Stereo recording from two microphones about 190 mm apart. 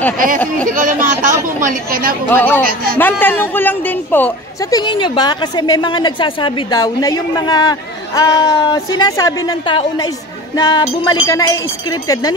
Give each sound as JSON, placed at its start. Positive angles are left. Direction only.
{"t": 0.7, "sound": "speech", "side_deg": -45}
{"t": 2.2, "sound": "a woman's voice", "side_deg": 10}
{"t": 2.6, "sound": "speech", "side_deg": -50}
{"t": 3.0, "sound": "a woman's voice", "side_deg": 10}
{"t": 4.7, "sound": "a woman's voice", "side_deg": 25}